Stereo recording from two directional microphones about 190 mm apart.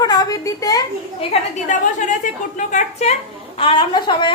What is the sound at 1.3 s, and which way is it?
A woman's voice, 40° left (ahead or behind).